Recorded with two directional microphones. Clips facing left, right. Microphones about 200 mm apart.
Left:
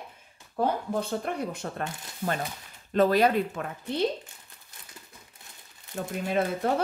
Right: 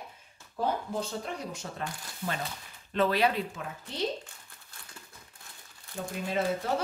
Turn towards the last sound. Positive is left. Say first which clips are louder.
# left 4 dB
turn(degrees=55)  # may be behind; listen again after turning